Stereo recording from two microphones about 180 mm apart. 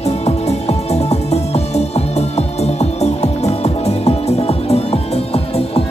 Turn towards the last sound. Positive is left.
turn(degrees=35)  # may be behind; listen again after turning